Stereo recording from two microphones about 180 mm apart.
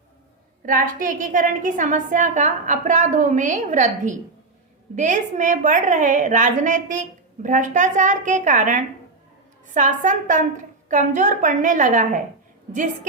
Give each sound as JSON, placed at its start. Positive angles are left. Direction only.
{"t": 0.6, "sound": "a woman's voice", "side_deg": -50}